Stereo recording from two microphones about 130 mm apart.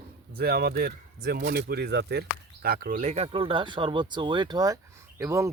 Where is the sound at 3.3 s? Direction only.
40° right (ahead or behind).